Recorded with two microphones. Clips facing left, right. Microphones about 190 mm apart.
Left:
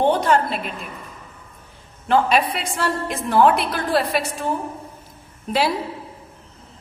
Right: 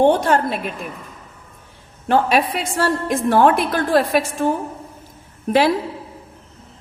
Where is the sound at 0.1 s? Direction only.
45° right (ahead or behind).